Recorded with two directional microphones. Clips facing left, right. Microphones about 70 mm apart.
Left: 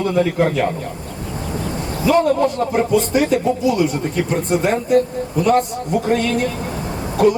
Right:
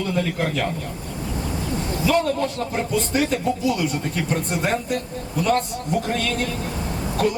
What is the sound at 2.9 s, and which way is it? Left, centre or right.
Speech, centre.